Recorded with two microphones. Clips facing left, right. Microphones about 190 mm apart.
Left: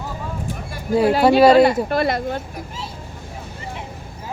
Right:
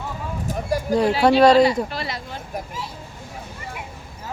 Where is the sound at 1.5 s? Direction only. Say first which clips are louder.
Left 3 dB; 55° left (ahead or behind).